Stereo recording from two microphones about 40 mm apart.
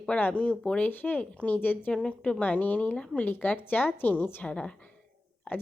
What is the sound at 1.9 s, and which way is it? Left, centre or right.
Speech, left.